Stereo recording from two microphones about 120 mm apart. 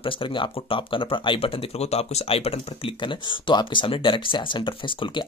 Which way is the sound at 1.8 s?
60° left (ahead or behind).